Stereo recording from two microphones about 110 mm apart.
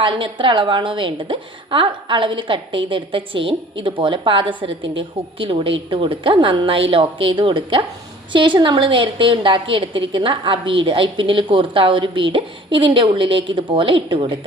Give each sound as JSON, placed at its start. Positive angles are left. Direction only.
{"t": 0.0, "sound": "a woman's voice", "side_deg": -50}